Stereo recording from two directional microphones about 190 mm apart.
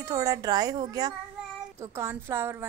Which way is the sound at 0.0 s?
20° right (ahead or behind).